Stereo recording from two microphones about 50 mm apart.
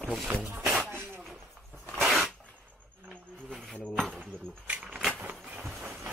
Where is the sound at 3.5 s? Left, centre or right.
Centre.